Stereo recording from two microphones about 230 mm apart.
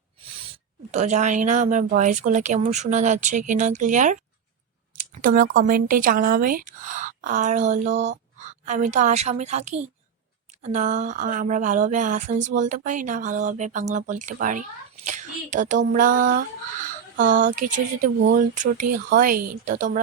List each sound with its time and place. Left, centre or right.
0.3 s a woman's voice: right